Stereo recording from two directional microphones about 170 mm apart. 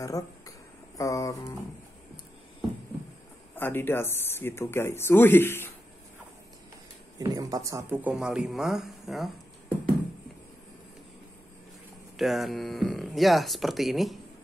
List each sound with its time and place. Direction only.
0.0 s a sound: 20° left (ahead or behind)
3.5 s speech: 10° left (ahead or behind)
7.2 s speech: 20° right (ahead or behind); by 9.8 s centre (ahead or behind)
12.2 s speech: centre (ahead or behind)